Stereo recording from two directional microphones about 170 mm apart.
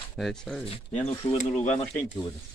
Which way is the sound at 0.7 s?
40° left (ahead or behind).